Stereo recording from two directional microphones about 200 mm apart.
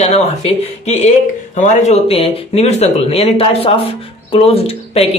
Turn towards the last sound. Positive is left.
turn(degrees=30)  # may be behind; listen again after turning